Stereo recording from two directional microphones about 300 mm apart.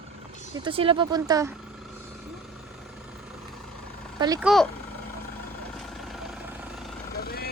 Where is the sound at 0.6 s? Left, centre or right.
Centre.